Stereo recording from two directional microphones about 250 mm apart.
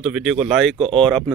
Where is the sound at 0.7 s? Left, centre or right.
Right.